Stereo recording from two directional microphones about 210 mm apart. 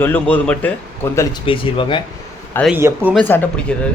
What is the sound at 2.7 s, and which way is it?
Speech, 10° right (ahead or behind).